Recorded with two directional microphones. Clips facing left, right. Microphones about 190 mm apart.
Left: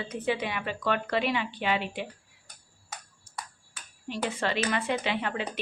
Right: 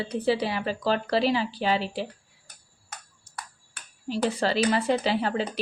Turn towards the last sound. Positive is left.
turn(degrees=-35)  # may be behind; listen again after turning